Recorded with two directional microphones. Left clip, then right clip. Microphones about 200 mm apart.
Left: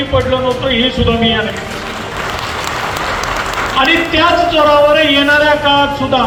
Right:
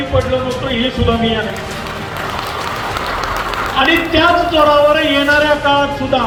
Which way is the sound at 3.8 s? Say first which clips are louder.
Even; 25° left (ahead or behind).